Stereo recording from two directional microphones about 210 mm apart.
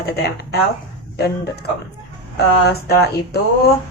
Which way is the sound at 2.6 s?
50° left (ahead or behind).